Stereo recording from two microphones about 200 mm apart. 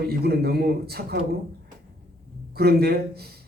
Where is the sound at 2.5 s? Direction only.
50° right (ahead or behind).